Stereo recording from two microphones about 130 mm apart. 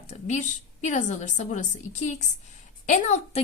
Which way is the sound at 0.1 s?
65° left (ahead or behind).